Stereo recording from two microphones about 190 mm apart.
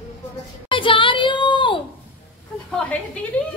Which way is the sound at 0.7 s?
25° left (ahead or behind).